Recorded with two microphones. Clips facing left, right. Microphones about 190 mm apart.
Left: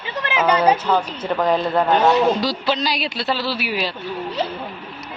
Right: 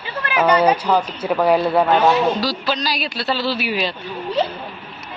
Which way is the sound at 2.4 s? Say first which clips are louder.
Left 1 dB; 20° left (ahead or behind).